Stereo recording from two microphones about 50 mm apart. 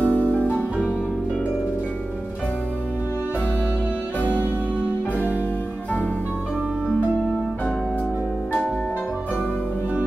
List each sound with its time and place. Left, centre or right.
0.0 s music: left